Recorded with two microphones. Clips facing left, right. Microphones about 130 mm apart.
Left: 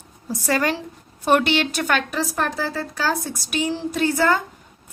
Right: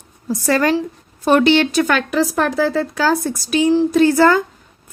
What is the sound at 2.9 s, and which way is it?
A woman's voice, 90° right.